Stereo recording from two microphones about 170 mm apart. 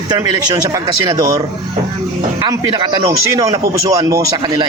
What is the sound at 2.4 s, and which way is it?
Speech, 25° right (ahead or behind).